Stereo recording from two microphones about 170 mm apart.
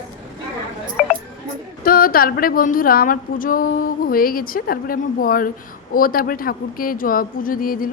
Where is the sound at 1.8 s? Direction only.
60° left (ahead or behind).